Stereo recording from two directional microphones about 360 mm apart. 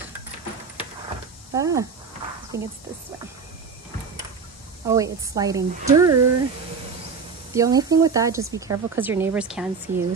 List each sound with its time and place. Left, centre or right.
1.5 s speech: centre
4.8 s speech: centre
7.5 s speech: centre
9.9 s speech: right